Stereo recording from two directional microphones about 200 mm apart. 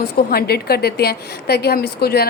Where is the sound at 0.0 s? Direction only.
50° left (ahead or behind).